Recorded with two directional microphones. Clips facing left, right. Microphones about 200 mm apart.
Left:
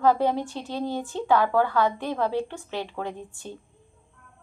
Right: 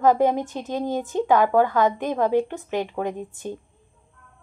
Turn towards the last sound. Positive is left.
turn(degrees=-15)  # may be behind; listen again after turning